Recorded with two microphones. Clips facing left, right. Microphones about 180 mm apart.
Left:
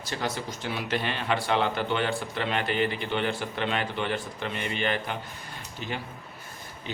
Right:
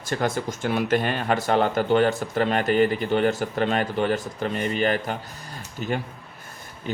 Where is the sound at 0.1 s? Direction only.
50° right (ahead or behind).